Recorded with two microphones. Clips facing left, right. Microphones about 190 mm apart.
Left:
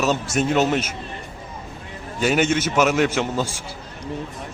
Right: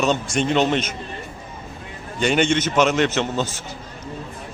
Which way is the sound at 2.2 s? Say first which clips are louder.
Even; 5° left (ahead or behind).